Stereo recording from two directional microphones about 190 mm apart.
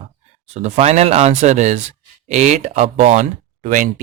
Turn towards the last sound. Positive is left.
turn(degrees=-45)  # may be behind; listen again after turning